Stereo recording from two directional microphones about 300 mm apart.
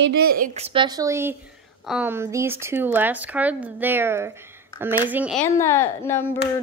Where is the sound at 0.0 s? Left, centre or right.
Right; by 5.4 s centre.